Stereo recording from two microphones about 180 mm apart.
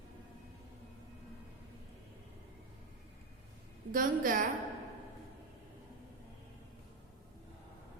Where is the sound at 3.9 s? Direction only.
50° right (ahead or behind).